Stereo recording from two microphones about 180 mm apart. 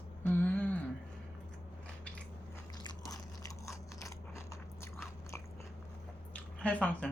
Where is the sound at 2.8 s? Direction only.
20° left (ahead or behind).